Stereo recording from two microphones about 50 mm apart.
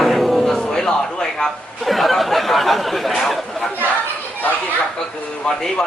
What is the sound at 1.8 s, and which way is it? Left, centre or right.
Speech, centre.